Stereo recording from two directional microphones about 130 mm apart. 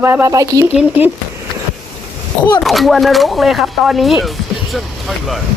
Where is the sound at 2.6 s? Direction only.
Centre (ahead or behind).